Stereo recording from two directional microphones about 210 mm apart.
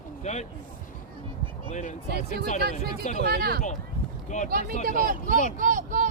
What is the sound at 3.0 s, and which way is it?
Speech, 35° left (ahead or behind).